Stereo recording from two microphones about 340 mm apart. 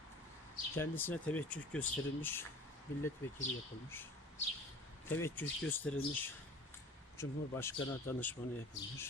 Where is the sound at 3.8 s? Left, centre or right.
Centre.